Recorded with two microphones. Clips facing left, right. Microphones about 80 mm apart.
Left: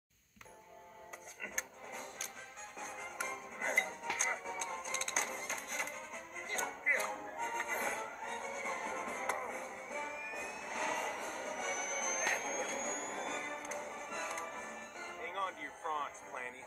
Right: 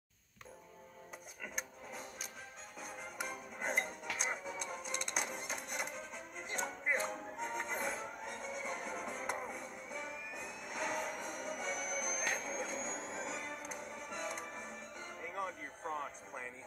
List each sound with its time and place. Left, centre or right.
1.4 s wood: centre
2.8 s music: centre
10.8 s vehicle: left
11.1 s a sound: centre
15.2 s music: centre